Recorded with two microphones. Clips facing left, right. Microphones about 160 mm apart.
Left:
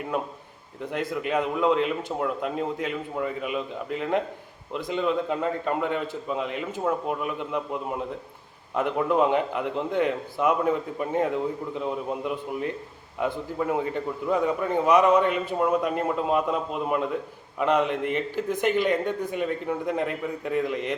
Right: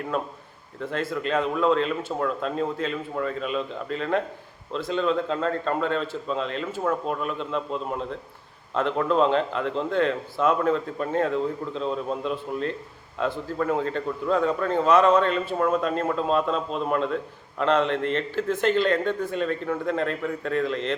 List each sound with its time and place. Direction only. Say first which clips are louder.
0.1 s a man's voice: right 1 dB; 15° left (ahead or behind)